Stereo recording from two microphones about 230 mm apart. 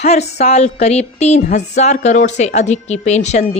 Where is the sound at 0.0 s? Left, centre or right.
Left.